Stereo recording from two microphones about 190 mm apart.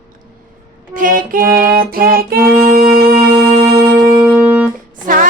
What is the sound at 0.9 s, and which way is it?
Music, 45° right (ahead or behind).